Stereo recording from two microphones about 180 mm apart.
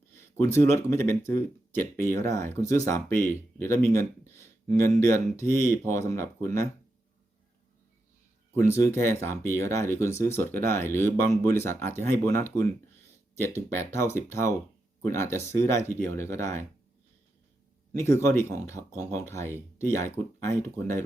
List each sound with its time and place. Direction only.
0.1 s speech: 15° left (ahead or behind)
8.5 s speech: 15° left (ahead or behind)
17.9 s speech: 15° left (ahead or behind)